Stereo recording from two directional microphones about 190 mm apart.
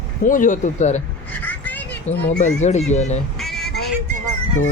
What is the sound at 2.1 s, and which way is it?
Speech, 35° left (ahead or behind).